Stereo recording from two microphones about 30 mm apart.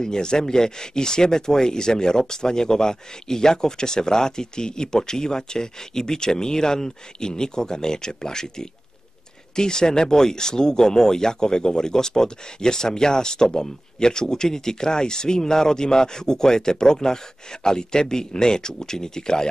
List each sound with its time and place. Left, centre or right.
0.0 s speech: left